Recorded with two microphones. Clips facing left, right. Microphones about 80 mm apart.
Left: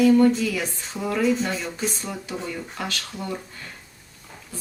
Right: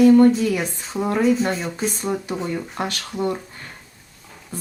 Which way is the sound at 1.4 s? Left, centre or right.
Right.